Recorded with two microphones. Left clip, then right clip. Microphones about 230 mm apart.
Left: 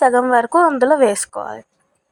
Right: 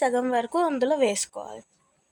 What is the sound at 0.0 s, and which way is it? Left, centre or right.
A woman's voice, centre.